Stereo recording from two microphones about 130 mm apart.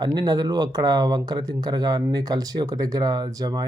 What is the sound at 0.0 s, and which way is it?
Speech, 35° right (ahead or behind).